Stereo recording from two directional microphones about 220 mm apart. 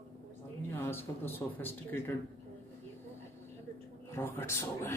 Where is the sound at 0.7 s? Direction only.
10° left (ahead or behind).